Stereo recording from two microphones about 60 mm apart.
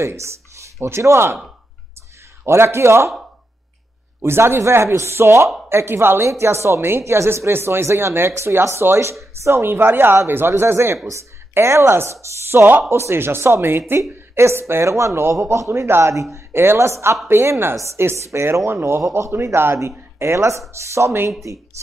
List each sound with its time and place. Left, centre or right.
0.0 s speech: right
2.4 s speech: right
4.2 s a man's voice: right
15.3 s a man's voice: right